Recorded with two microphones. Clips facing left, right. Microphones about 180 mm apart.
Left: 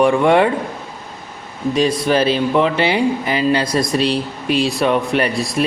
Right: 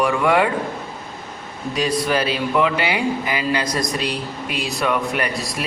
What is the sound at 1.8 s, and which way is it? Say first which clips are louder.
A woman's voice: left 4 dB; 25° left (ahead or behind).